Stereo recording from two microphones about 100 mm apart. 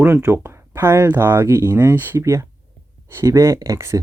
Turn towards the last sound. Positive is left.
turn(degrees=-30)  # may be behind; listen again after turning